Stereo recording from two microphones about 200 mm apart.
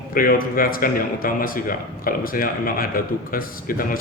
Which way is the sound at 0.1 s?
45° left (ahead or behind).